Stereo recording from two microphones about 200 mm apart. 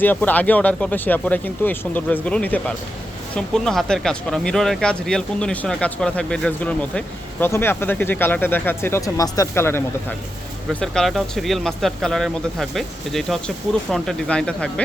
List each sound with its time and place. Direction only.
0.0 s speech: 10° left (ahead or behind)
10.8 s speech: centre (ahead or behind)